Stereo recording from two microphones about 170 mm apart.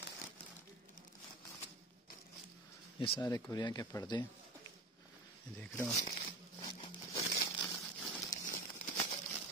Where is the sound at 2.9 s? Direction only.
25° left (ahead or behind).